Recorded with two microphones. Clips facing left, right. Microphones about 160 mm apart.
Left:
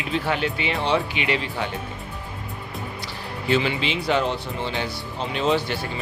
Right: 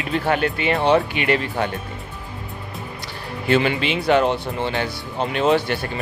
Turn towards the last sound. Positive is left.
turn(degrees=-55)  # may be behind; listen again after turning